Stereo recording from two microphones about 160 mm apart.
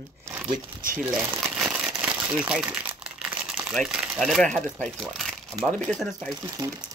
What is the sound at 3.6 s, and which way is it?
Speech, 5° right (ahead or behind).